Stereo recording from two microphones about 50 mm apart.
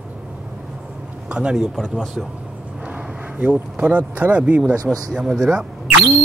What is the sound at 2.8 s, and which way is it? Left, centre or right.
Speech, right.